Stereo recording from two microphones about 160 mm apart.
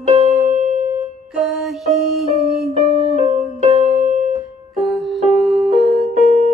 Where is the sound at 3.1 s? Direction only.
40° right (ahead or behind).